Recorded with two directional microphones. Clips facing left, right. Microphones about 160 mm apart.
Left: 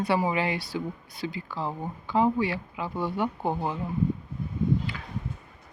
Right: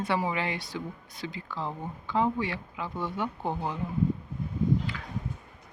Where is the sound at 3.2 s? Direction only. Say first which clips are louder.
Left 3 dB; 20° left (ahead or behind).